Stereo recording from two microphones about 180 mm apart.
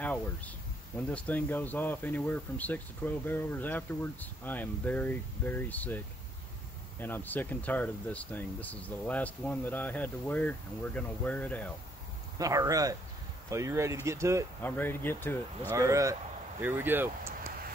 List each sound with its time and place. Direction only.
0.9 s speech: 5° left (ahead or behind)
12.4 s speech: 20° right (ahead or behind)
14.6 s speech: 10° left (ahead or behind)
15.7 s speech: 15° right (ahead or behind)